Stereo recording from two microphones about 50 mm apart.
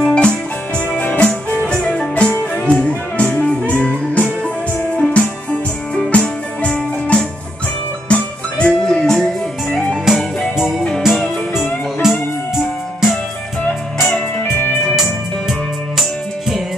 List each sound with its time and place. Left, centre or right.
0.0 s music: centre
1.0 s music: left
1.7 s music: centre
2.1 s music: left
8.6 s music: centre
10.0 s music: centre
14.1 s music: left
16.0 s music: centre